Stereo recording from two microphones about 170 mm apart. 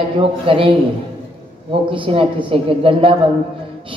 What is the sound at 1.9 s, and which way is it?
A man's voice, 30° right (ahead or behind).